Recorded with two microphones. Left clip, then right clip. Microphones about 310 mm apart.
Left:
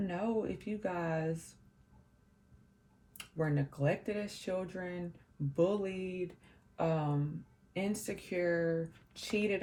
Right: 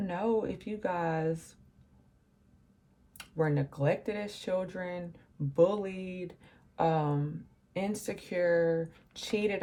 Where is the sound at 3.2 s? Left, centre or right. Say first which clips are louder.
Right 5 dB; centre.